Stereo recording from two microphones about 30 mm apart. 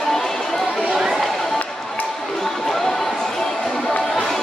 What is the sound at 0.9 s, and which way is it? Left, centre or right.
Chatter, centre.